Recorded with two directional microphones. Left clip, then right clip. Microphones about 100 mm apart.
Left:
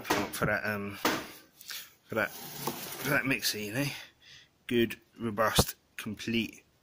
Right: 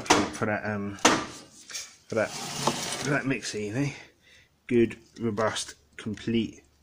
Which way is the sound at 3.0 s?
35° left (ahead or behind).